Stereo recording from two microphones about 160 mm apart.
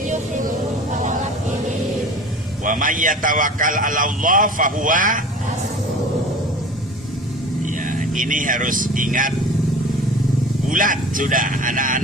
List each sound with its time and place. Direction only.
0.9 s vehicle: 50° right (ahead or behind)
2.6 s a man's voice: 55° right (ahead or behind)
8.1 s a man's voice: 55° right (ahead or behind)
10.7 s a man's voice: 55° right (ahead or behind)